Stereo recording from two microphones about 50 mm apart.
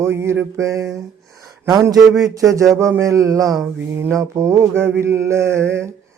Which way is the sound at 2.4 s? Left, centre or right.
Right.